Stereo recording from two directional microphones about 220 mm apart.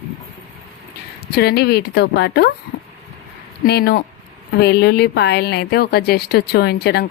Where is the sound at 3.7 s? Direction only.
45° left (ahead or behind).